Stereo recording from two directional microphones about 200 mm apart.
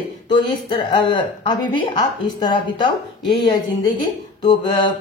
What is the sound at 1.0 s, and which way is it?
A woman's voice, 25° left (ahead or behind).